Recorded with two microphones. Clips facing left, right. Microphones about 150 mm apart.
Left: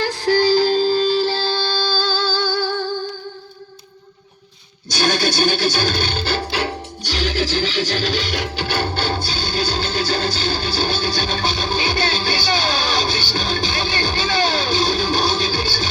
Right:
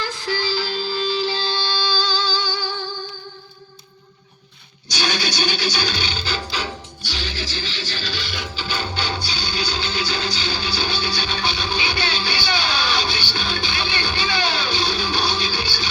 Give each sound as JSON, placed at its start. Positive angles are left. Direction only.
{"t": 0.0, "sound": "music", "side_deg": 55}
{"t": 4.9, "sound": "music", "side_deg": 50}
{"t": 8.3, "sound": "music", "side_deg": 65}